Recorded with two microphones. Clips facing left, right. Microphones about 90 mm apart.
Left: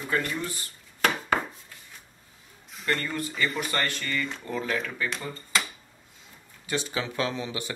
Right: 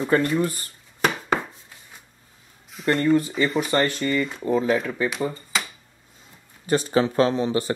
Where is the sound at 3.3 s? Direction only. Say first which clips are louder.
Right 7 dB; 35° right (ahead or behind).